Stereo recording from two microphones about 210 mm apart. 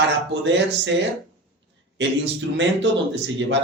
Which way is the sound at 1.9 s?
55° right (ahead or behind).